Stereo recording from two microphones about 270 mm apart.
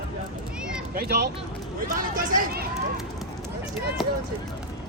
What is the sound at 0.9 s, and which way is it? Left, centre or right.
Speech, right.